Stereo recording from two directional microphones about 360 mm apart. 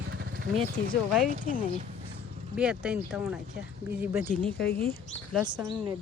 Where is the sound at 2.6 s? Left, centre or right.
Centre.